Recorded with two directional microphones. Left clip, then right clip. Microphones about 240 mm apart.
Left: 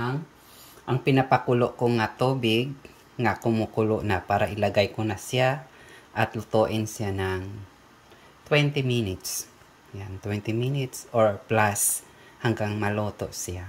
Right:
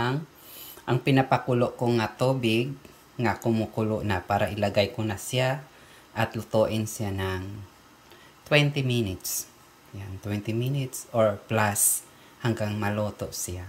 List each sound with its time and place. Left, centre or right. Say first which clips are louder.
0.8 s speech: left 1 dB; centre
8.5 s speech: even; centre
10.2 s speech: left 2 dB; centre